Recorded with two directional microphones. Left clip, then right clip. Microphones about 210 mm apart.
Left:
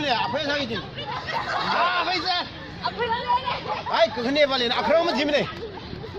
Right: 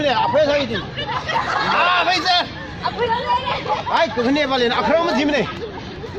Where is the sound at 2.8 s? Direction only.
15° left (ahead or behind).